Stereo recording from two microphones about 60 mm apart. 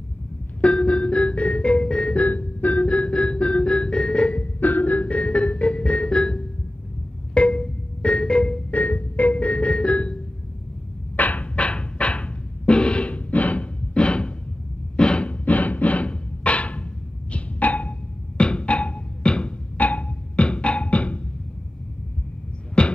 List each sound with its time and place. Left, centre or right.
0.6 s organ: centre
7.3 s music: centre
8.7 s organ: left
11.1 s music: left
17.3 s a sound: left
18.4 s music: centre
22.8 s music: centre